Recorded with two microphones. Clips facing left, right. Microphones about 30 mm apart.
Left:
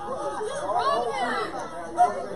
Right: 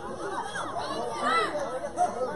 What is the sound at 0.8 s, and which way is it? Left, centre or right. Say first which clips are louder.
Chatter: left 10 dB; left.